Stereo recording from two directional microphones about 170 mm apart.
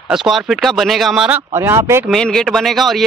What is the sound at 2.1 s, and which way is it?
Speech, 5° left (ahead or behind).